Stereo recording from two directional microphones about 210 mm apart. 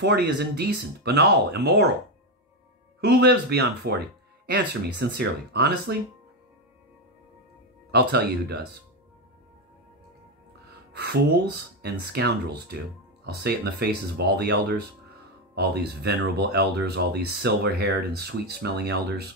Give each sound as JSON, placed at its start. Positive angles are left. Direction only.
{"t": 0.0, "sound": "speech", "side_deg": -50}
{"t": 3.0, "sound": "speech", "side_deg": -50}
{"t": 7.9, "sound": "speech", "side_deg": -50}
{"t": 11.0, "sound": "speech", "side_deg": -50}